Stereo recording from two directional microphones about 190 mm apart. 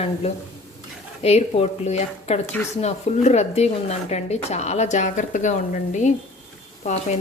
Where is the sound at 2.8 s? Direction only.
35° left (ahead or behind).